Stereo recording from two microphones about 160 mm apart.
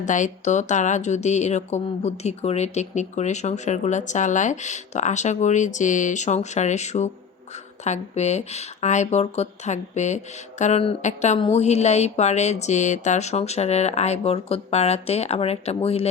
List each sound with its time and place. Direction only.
0.0 s speech: 50° left (ahead or behind)